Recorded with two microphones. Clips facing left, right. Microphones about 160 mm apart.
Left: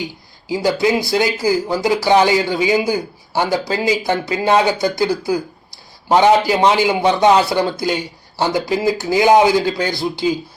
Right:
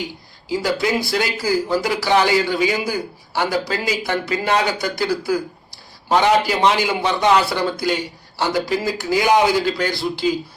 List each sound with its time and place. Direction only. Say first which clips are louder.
0.5 s speech: left 4 dB; 20° left (ahead or behind)